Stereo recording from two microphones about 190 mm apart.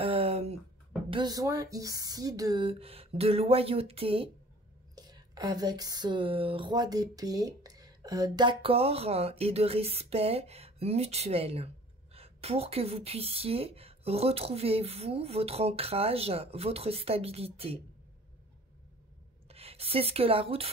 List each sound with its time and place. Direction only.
0.0 s a sound: 30° right (ahead or behind)
1.1 s speech: 20° right (ahead or behind)
19.5 s speech: 30° right (ahead or behind)